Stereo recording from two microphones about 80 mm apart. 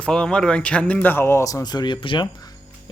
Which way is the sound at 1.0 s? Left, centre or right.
Left.